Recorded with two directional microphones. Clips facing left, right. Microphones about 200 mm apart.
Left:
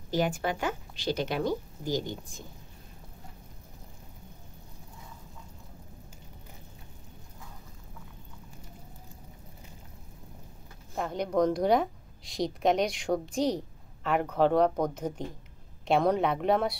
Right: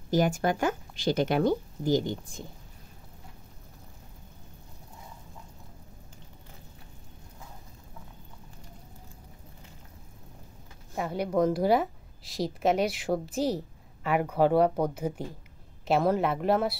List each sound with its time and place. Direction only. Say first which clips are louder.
0.1 s speech: right 3 dB; 45° right (ahead or behind)
11.0 s a woman's voice: right 1 dB; 5° right (ahead or behind)